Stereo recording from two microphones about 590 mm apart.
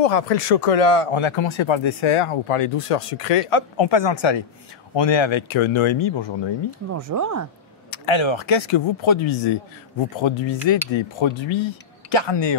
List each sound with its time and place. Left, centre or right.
0.0 s speech: left
6.9 s speech: right
7.9 s speech: left